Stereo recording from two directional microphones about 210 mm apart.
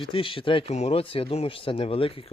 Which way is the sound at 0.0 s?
25° left (ahead or behind).